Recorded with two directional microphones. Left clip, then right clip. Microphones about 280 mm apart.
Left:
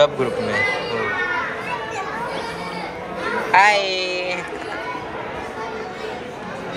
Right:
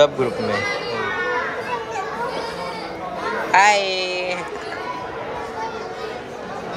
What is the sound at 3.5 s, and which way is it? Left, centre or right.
Speech, centre.